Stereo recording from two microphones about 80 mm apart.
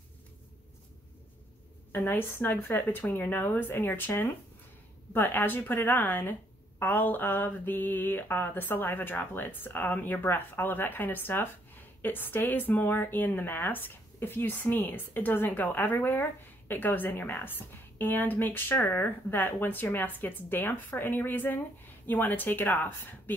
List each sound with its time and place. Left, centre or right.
2.0 s speech: left